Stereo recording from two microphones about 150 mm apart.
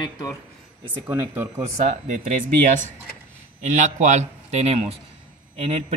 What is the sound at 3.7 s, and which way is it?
A man's voice, 55° right (ahead or behind).